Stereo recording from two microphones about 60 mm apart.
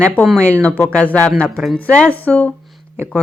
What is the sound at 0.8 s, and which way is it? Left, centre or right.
Speech, left.